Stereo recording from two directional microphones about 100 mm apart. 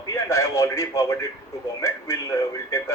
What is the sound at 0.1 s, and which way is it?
A man's voice, 35° left (ahead or behind).